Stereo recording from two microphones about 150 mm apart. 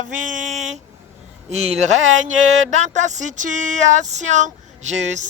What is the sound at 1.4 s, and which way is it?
Speech, 50° right (ahead or behind).